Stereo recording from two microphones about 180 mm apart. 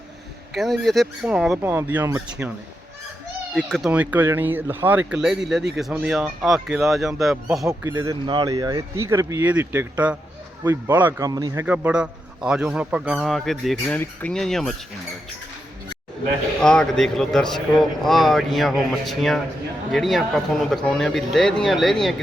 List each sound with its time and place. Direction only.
0.5 s speech: centre (ahead or behind)
3.5 s speech: 5° left (ahead or behind)
3.8 s speech: 5° right (ahead or behind)
7.7 s speech: 15° right (ahead or behind)
11.6 s speech: 10° right (ahead or behind)
16.6 s speech: 5° left (ahead or behind)